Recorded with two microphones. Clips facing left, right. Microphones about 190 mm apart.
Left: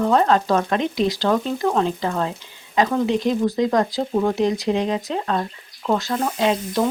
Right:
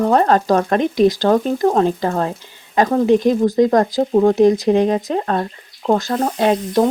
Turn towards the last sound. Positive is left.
turn(degrees=-45)  # may be behind; listen again after turning